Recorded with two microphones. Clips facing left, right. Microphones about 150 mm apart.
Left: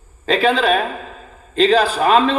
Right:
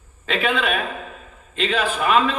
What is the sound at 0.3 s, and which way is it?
A man's voice, 35° left (ahead or behind).